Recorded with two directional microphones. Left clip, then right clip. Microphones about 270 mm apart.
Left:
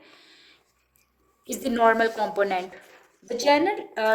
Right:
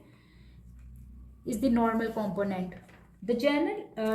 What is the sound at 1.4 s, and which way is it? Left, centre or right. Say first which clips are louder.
A woman's voice: left 7 dB; left.